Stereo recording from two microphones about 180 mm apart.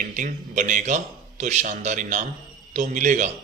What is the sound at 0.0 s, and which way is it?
A man's voice, 45° right (ahead or behind).